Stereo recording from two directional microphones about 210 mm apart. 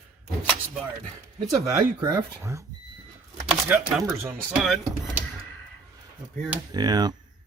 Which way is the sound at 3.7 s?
5° right (ahead or behind).